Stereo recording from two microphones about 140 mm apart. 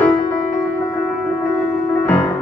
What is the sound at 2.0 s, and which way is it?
Music, 20° left (ahead or behind).